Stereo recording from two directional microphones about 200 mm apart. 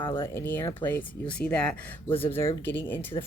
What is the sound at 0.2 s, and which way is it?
Speech, 10° left (ahead or behind).